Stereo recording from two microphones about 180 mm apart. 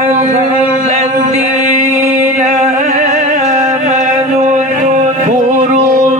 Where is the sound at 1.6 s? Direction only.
45° right (ahead or behind).